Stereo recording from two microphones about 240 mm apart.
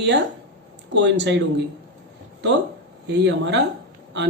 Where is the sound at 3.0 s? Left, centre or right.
Right.